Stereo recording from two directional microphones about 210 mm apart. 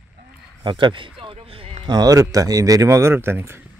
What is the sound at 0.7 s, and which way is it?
A man's voice, 25° right (ahead or behind).